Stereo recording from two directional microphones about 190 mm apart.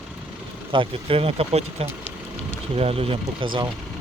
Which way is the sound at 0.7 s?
30° right (ahead or behind).